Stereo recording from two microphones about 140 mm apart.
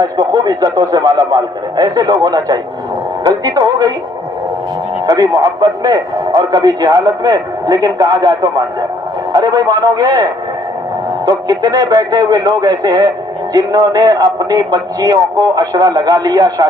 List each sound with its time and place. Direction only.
0.0 s speech: 25° right (ahead or behind)
5.0 s speech: 25° right (ahead or behind)
11.3 s speech: 25° right (ahead or behind)